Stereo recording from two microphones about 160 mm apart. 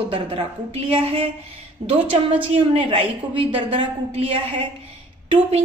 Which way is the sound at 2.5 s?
35° right (ahead or behind).